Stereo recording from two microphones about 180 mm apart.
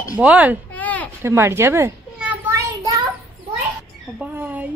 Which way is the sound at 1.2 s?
15° right (ahead or behind).